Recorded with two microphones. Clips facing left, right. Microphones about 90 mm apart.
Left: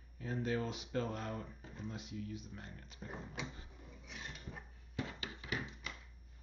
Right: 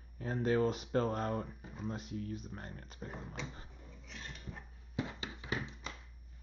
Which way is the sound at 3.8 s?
10° left (ahead or behind).